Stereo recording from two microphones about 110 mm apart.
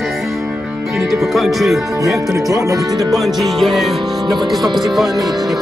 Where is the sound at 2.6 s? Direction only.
30° right (ahead or behind).